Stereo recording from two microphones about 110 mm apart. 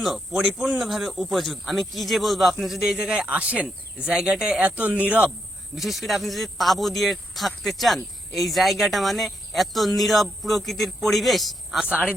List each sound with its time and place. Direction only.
0.0 s speech: centre (ahead or behind)
11.9 s speech: 10° right (ahead or behind)